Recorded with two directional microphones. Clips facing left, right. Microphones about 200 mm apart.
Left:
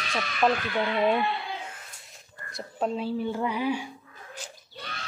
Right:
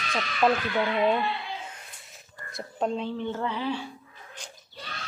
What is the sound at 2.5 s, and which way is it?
Speech, centre (ahead or behind).